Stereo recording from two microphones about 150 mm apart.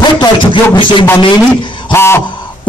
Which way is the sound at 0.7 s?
35° left (ahead or behind).